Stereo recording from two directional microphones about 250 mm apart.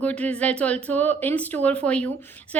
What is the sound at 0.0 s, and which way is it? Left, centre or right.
A woman's voice, centre.